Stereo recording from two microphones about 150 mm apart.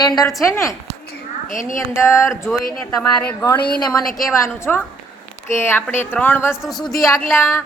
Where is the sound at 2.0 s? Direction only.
20° left (ahead or behind).